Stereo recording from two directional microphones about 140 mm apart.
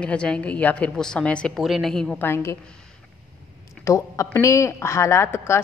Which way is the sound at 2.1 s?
15° left (ahead or behind).